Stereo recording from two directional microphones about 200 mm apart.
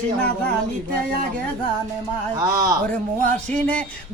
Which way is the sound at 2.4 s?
15° right (ahead or behind).